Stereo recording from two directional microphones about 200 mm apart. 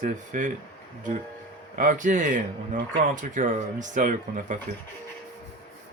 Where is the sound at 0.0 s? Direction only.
40° right (ahead or behind).